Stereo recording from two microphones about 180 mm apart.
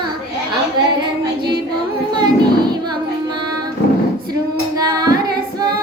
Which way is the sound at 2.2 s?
25° right (ahead or behind).